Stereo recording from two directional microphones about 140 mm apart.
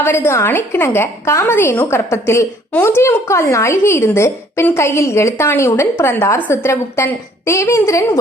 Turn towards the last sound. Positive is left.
turn(degrees=20)  # may be behind; listen again after turning